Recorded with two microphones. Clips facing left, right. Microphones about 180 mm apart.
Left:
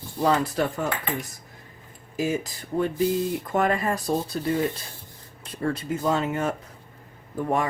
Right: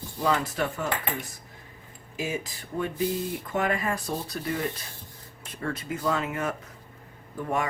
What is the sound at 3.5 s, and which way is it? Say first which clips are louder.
Speech: left 2 dB; 40° left (ahead or behind).